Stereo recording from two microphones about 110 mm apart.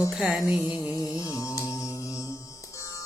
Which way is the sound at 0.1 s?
5° right (ahead or behind).